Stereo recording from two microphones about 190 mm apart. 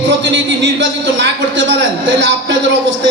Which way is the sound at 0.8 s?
70° right (ahead or behind).